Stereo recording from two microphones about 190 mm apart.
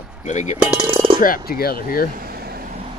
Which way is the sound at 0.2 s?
40° left (ahead or behind).